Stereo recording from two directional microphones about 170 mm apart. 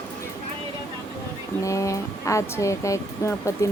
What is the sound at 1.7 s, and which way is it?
Speech, 20° left (ahead or behind).